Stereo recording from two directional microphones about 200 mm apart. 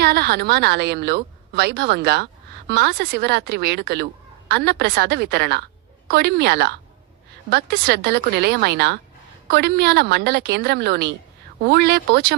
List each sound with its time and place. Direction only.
0.0 s a woman's voice: 55° right (ahead or behind)